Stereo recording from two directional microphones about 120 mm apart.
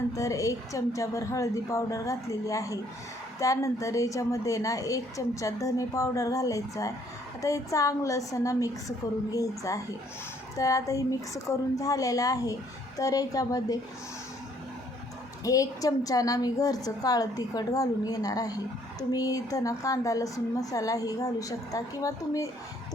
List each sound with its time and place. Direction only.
0.1 s a woman's voice: 25° left (ahead or behind)
15.4 s a woman's voice: 30° left (ahead or behind)